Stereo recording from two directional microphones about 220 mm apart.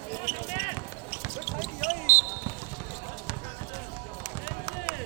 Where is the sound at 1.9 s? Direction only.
5° right (ahead or behind).